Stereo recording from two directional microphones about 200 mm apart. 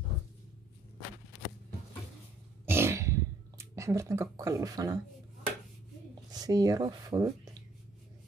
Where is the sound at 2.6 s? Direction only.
10° right (ahead or behind).